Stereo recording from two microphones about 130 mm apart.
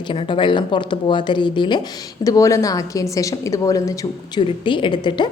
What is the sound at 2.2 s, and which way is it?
A woman's voice, 25° left (ahead or behind).